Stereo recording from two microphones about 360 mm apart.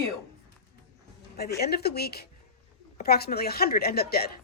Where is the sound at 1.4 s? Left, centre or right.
Left.